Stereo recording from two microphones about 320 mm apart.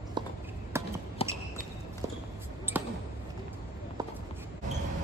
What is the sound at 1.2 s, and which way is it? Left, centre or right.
Basketball bounce, centre.